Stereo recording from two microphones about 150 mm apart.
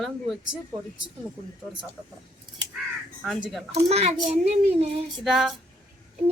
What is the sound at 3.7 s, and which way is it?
A child's voice, 45° right (ahead or behind).